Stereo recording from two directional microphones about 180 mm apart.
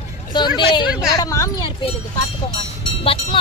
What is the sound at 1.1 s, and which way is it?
Speech, 20° left (ahead or behind).